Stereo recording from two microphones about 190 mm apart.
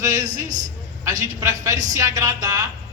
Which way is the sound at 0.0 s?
20° right (ahead or behind).